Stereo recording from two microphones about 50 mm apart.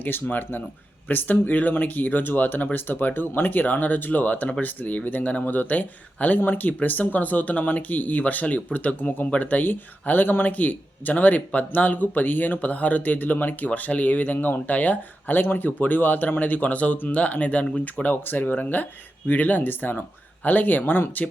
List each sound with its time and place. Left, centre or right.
0.0 s speech: left